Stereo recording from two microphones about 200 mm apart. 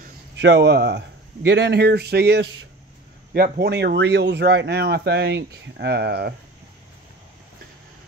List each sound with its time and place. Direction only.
0.4 s speech: 60° right (ahead or behind)